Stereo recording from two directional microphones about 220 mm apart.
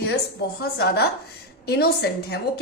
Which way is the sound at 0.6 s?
45° left (ahead or behind).